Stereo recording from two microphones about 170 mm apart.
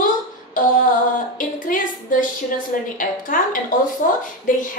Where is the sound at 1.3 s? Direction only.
50° left (ahead or behind).